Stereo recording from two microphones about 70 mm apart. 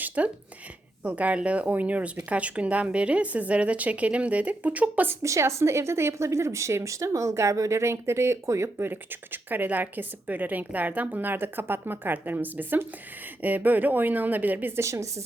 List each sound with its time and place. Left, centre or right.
0.2 s a woman's voice: right
5.2 s speech: right
8.9 s a woman's voice: right
14.8 s speech: right